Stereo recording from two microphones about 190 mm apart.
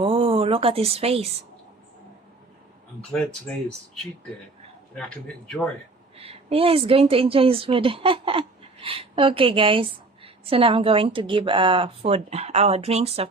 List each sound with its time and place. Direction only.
0.0 s speech: 30° right (ahead or behind)
3.1 s speech: 5° left (ahead or behind)
4.9 s speech: 5° left (ahead or behind)
6.1 s a woman's voice: 30° right (ahead or behind)